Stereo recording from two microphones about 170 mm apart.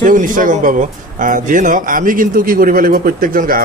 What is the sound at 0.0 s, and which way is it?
Speech, 50° right (ahead or behind).